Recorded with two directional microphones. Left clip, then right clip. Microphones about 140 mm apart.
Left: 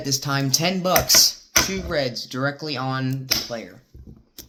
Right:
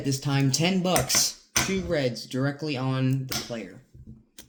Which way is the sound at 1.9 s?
15° right (ahead or behind).